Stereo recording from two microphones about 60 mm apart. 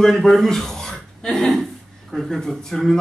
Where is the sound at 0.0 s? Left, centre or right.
Centre.